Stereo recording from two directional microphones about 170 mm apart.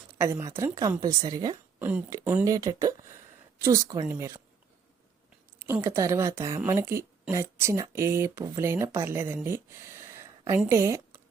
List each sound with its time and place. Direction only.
0.2 s a woman's voice: 15° right (ahead or behind)
1.8 s a woman's voice: 10° right (ahead or behind)
5.8 s speech: 20° right (ahead or behind)